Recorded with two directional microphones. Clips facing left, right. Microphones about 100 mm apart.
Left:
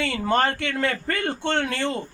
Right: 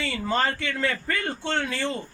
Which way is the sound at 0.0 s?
60° left (ahead or behind).